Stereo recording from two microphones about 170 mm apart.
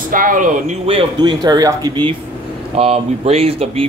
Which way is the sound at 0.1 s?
55° right (ahead or behind).